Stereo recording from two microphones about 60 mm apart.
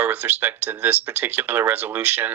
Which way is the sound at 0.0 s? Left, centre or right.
Right.